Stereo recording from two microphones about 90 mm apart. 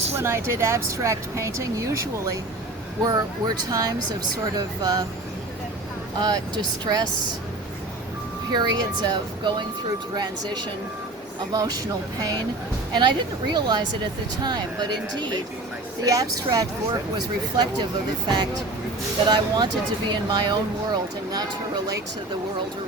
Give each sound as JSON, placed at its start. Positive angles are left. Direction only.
{"t": 0.1, "sound": "speech", "side_deg": -30}
{"t": 3.0, "sound": "speech", "side_deg": -45}
{"t": 6.1, "sound": "speech", "side_deg": -50}
{"t": 8.5, "sound": "speech", "side_deg": -50}
{"t": 11.3, "sound": "speech", "side_deg": -45}
{"t": 12.9, "sound": "a woman's voice", "side_deg": -55}
{"t": 16.0, "sound": "speech", "side_deg": -45}